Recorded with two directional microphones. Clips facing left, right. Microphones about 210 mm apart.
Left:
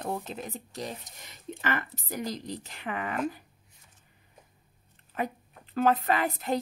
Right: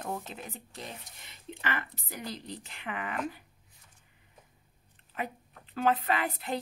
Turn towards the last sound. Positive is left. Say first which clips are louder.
# left 4 dB
turn(degrees=45)  # may be behind; listen again after turning